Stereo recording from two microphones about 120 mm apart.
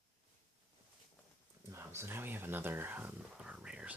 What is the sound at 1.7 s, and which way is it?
Speech, 20° right (ahead or behind).